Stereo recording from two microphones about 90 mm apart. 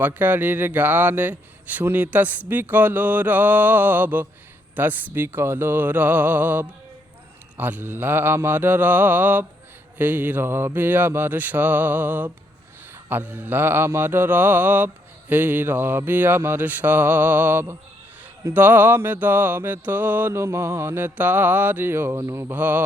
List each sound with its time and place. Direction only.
0.0 s speech: 20° right (ahead or behind)
22.2 s mantra: 30° right (ahead or behind)
22.5 s speech: 20° right (ahead or behind)